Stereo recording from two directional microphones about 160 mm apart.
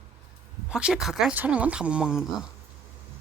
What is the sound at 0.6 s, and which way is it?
Speech, 5° right (ahead or behind).